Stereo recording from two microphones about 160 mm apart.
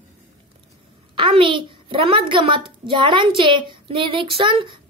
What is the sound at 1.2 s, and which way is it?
A child's voice, 35° right (ahead or behind).